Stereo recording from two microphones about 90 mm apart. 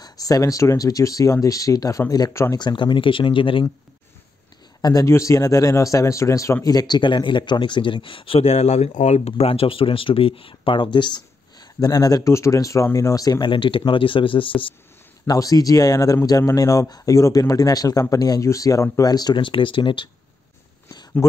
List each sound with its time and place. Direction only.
0.0 s speech: 40° left (ahead or behind)
2.5 s speech: 60° left (ahead or behind)
4.8 s speech: 35° left (ahead or behind)
13.5 s speech: 70° left (ahead or behind)
15.2 s speech: 40° left (ahead or behind)
19.4 s speech: 70° left (ahead or behind)
21.2 s speech: 35° left (ahead or behind)